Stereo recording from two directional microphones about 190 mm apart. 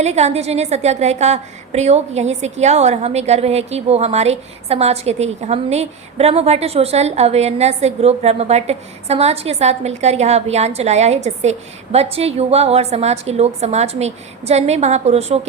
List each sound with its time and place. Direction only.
0.0 s a woman's voice: 35° right (ahead or behind)